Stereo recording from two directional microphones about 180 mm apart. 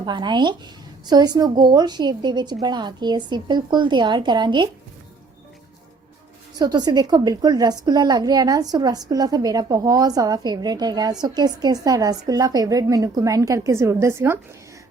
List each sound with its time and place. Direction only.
0.0 s a woman's voice: 25° right (ahead or behind)
6.6 s a woman's voice: 20° right (ahead or behind)